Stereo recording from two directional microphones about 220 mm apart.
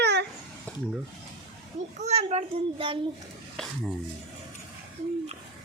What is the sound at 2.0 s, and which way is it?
A child's voice, 30° right (ahead or behind).